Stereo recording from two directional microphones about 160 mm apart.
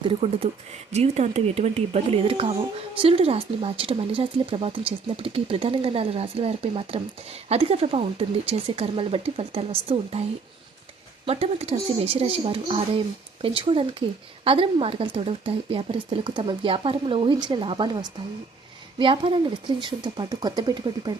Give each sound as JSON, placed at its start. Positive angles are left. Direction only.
{"t": 0.0, "sound": "speech", "side_deg": -35}
{"t": 11.3, "sound": "speech", "side_deg": -40}